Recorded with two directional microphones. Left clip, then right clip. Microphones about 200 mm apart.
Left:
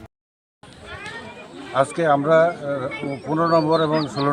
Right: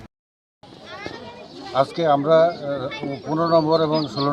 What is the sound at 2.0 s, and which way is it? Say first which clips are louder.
Speech: even; 30° left (ahead or behind).